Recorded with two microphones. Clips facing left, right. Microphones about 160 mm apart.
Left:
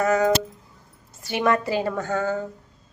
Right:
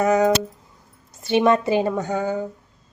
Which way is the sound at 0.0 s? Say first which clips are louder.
Right 2 dB; 20° right (ahead or behind).